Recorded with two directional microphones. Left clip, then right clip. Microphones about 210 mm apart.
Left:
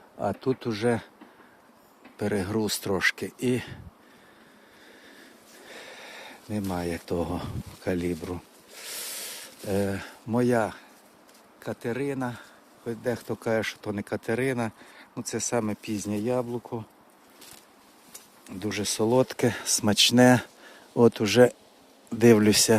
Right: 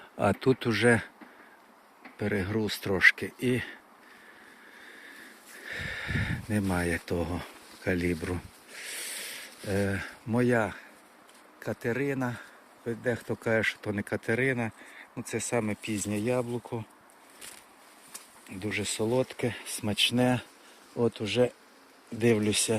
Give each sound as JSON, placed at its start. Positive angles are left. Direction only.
{"t": 0.2, "sound": "speech", "side_deg": -10}
{"t": 2.1, "sound": "speech", "side_deg": 15}
{"t": 5.6, "sound": "a sound", "side_deg": 0}
{"t": 7.9, "sound": "speech", "side_deg": 10}
{"t": 9.3, "sound": "speech", "side_deg": 10}
{"t": 11.6, "sound": "speech", "side_deg": 0}
{"t": 18.6, "sound": "speech", "side_deg": 30}